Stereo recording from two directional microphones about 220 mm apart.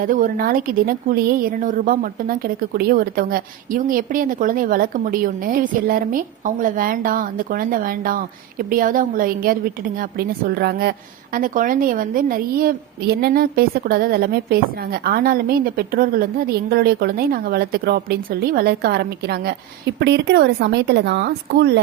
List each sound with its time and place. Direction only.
0.0 s a woman's voice: 40° right (ahead or behind)